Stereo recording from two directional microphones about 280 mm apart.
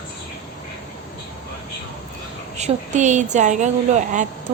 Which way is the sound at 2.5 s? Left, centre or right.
Right.